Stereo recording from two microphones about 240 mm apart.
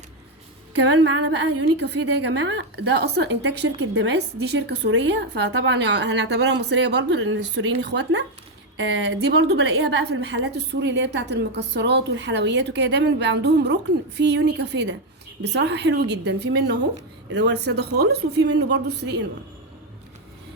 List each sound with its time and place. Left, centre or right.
0.7 s a woman's voice: right